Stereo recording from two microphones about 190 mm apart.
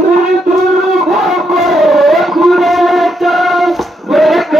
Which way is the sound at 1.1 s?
Centre (ahead or behind).